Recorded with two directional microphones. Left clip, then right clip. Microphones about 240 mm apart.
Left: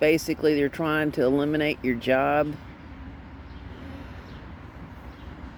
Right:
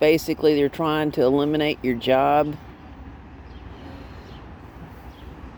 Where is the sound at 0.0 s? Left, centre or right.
Right.